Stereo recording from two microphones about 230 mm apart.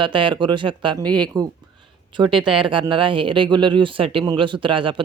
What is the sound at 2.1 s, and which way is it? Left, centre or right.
Speech, right.